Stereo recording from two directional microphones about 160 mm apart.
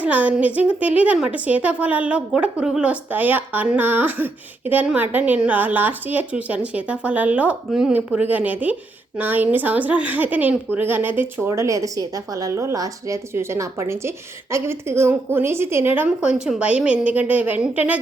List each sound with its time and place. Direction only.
0.0 s a woman's voice: 10° right (ahead or behind)